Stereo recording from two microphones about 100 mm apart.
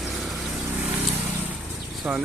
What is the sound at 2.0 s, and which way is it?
Speech, 15° right (ahead or behind).